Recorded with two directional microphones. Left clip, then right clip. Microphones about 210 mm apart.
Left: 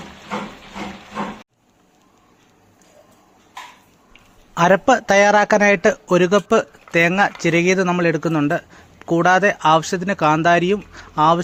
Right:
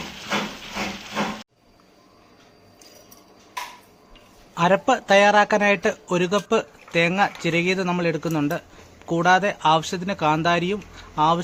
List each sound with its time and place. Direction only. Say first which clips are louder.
4.5 s a man's voice: left 5 dB; 25° left (ahead or behind)